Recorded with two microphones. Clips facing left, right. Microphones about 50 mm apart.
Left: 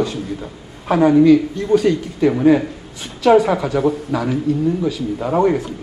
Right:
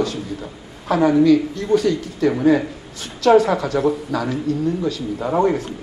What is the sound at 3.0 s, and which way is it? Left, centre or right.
A man's voice, centre.